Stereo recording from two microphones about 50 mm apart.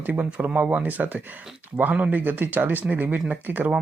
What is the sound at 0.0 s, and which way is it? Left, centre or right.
Speech, right.